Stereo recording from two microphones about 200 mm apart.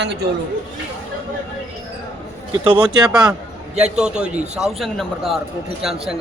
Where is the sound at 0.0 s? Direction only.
55° right (ahead or behind).